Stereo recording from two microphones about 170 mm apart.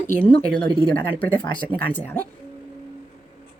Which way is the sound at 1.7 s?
60° right (ahead or behind).